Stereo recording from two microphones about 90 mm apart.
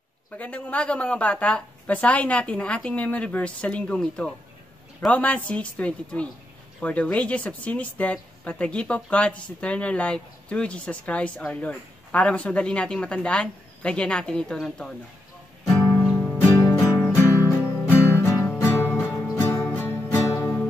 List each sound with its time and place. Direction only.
0.4 s speech: 15° left (ahead or behind)
15.6 s music: 35° left (ahead or behind)
16.0 s music: 15° left (ahead or behind)
16.4 s music: 35° left (ahead or behind)
19.1 s music: 45° left (ahead or behind)
19.4 s music: 20° left (ahead or behind)